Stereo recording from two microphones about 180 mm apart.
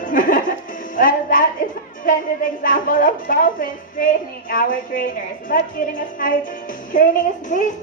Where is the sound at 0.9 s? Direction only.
50° left (ahead or behind).